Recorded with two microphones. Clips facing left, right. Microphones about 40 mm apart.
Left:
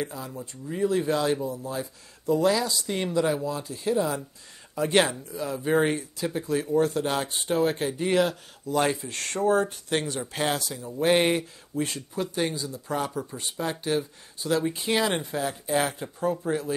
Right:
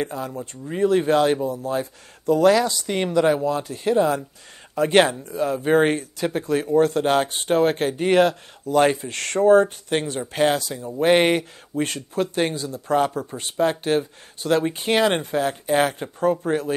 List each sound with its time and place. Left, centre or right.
0.0 s speech: right
0.3 s speech: right
0.7 s speech: right
11.8 s speech: right